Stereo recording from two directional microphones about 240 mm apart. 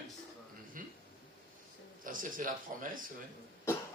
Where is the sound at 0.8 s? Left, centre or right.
Right.